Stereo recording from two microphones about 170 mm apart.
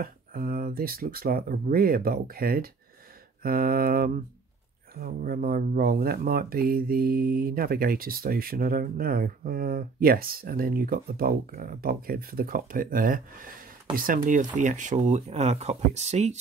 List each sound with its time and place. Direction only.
0.0 s speech: 60° right (ahead or behind); by 16.3 s 40° right (ahead or behind)